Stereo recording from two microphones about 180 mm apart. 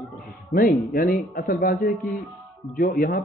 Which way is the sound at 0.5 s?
50° left (ahead or behind).